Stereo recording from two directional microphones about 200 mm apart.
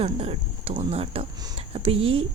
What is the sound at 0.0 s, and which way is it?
Speech, 30° right (ahead or behind).